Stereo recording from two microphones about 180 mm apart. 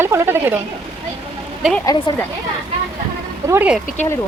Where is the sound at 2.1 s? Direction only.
25° left (ahead or behind).